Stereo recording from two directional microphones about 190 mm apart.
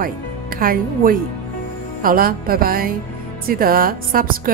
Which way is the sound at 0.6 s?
50° right (ahead or behind).